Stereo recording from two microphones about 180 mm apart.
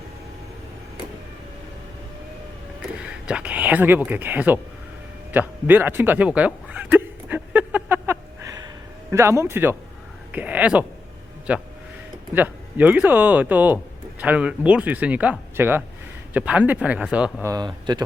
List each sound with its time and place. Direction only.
2.9 s speech: 5° right (ahead or behind)
5.3 s a sound: 10° right (ahead or behind)
10.3 s speech: 10° right (ahead or behind)
17.5 s speech: 25° right (ahead or behind)